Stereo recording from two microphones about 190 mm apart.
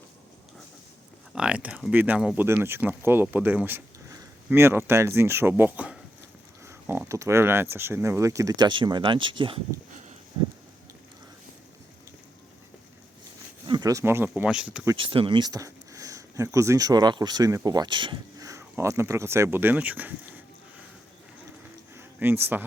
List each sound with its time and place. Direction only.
1.4 s speech: 5° right (ahead or behind); by 9.3 s 25° right (ahead or behind)
13.7 s speech: 20° right (ahead or behind); by 14.8 s 5° right (ahead or behind)
14.9 s speech: 25° right (ahead or behind); by 20.8 s 10° right (ahead or behind)
21.9 s a sound: 10° right (ahead or behind)